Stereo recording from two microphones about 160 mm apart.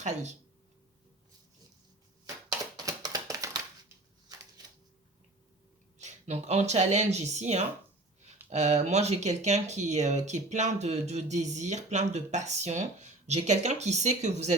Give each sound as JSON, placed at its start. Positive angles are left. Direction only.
{"t": 0.0, "sound": "speech", "side_deg": -45}
{"t": 2.2, "sound": "a sound", "side_deg": -20}
{"t": 6.0, "sound": "speech", "side_deg": -45}